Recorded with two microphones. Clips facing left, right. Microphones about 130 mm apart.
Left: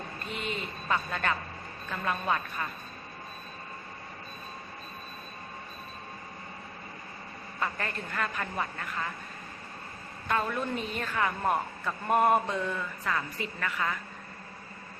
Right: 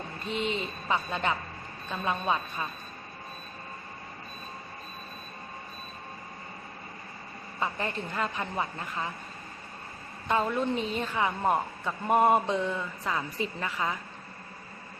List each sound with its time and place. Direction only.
0.3 s a woman's voice: 25° right (ahead or behind)
7.6 s a woman's voice: 20° right (ahead or behind)
10.2 s a woman's voice: 20° right (ahead or behind)